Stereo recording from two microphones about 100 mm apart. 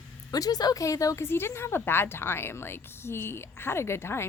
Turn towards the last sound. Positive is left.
turn(degrees=25)  # may be behind; listen again after turning